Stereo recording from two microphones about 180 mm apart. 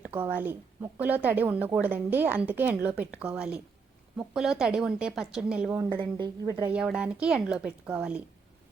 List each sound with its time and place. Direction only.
0.1 s a woman's voice: 10° right (ahead or behind)
5.9 s a woman's voice: 25° right (ahead or behind)
6.7 s a woman's voice: 5° right (ahead or behind)